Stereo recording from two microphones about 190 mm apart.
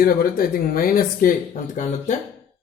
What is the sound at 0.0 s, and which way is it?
Speech, 50° left (ahead or behind).